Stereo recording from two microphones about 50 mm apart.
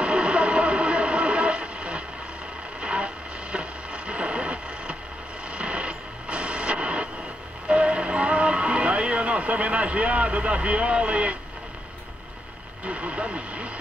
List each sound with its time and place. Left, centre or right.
0.0 s radio: right
2.8 s vehicle: right
3.5 s wood: right
5.5 s a sound: right
7.6 s music: right
12.8 s speech: right